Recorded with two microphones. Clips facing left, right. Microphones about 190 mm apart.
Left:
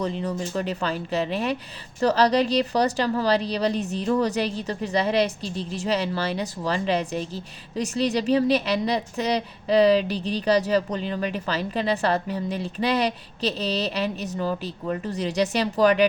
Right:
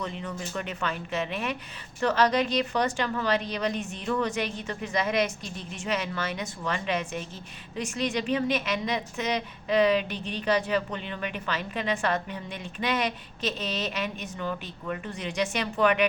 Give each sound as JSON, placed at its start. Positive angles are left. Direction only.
{"t": 0.0, "sound": "speech", "side_deg": 35}